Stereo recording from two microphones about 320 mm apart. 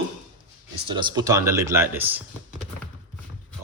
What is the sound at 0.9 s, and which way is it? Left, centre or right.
Speech, centre.